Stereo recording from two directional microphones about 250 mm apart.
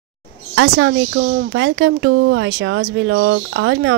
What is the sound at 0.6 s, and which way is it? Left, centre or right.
Speech, right.